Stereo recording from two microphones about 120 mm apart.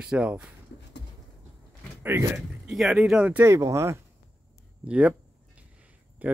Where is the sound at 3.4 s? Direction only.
25° right (ahead or behind).